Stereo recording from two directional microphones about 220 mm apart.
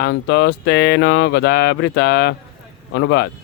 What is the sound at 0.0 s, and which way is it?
Speech, 50° left (ahead or behind).